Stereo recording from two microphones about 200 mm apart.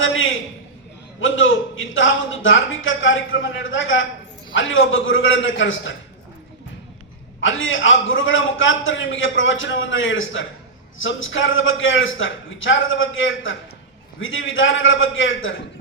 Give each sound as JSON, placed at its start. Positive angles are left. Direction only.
{"t": 0.0, "sound": "a man's voice", "side_deg": 75}
{"t": 7.4, "sound": "a man's voice", "side_deg": 75}